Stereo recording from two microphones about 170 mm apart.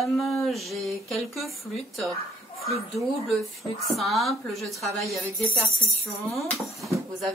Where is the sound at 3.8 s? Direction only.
Centre (ahead or behind).